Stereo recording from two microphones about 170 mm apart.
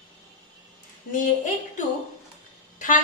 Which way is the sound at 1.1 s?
50° left (ahead or behind).